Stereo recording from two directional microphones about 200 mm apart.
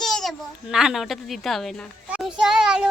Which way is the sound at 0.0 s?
Centre (ahead or behind).